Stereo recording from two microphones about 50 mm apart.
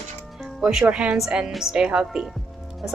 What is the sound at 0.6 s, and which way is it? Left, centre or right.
Speech, centre.